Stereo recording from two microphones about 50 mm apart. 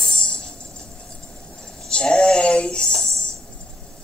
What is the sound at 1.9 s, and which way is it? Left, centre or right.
Music, centre.